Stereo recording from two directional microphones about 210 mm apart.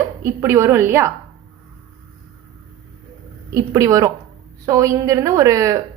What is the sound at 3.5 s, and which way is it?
A woman's voice, 15° right (ahead or behind).